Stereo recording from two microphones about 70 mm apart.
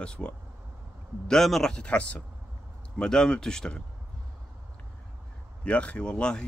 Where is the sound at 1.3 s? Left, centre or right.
Centre.